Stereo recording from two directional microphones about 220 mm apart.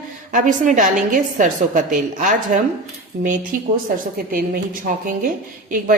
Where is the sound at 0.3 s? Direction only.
35° right (ahead or behind).